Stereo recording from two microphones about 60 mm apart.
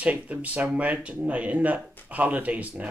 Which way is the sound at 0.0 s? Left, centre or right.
Right.